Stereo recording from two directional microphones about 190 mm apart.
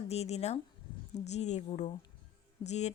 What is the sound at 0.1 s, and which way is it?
Speech, 35° left (ahead or behind).